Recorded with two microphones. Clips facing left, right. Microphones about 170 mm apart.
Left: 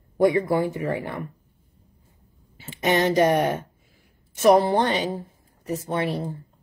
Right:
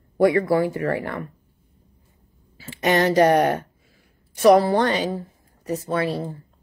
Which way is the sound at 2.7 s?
20° left (ahead or behind).